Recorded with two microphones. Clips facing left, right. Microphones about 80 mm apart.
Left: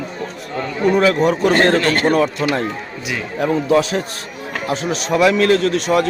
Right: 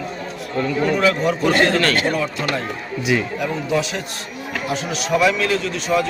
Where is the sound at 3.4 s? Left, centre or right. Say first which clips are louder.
Left 6 dB; left.